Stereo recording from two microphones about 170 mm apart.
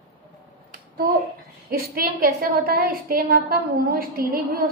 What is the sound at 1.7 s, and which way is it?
A woman's voice, 60° right (ahead or behind).